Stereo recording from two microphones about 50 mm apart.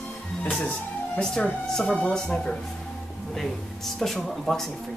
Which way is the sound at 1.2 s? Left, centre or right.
Centre.